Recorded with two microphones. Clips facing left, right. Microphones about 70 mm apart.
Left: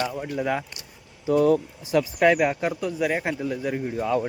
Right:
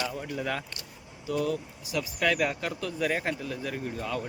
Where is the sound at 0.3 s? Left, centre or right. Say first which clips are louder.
Left 7 dB; centre.